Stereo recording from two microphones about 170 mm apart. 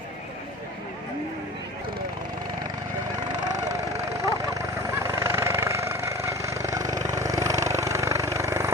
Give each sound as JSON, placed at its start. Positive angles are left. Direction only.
{"t": 4.2, "sound": "vehicle", "side_deg": -20}